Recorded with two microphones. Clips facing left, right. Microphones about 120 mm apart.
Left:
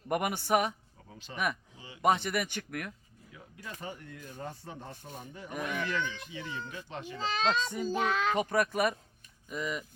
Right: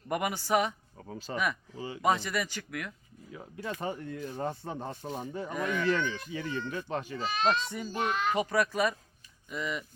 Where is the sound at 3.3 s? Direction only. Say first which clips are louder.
Right 8 dB; 40° right (ahead or behind).